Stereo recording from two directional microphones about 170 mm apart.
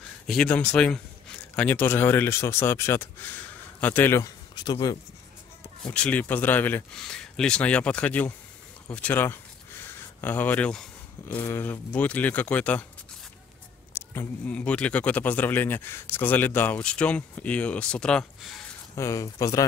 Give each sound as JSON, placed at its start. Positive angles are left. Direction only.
{"t": 0.3, "sound": "speech", "side_deg": 5}
{"t": 5.9, "sound": "speech", "side_deg": 5}
{"t": 13.9, "sound": "speech", "side_deg": 10}
{"t": 18.9, "sound": "speech", "side_deg": 20}